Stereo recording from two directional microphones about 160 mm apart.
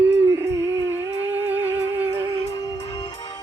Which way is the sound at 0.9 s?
10° right (ahead or behind).